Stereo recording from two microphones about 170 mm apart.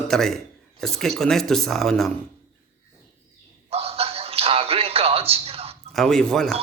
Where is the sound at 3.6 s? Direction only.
35° right (ahead or behind).